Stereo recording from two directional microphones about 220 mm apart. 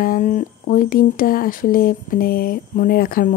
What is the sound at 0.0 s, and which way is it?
Speech, 35° left (ahead or behind).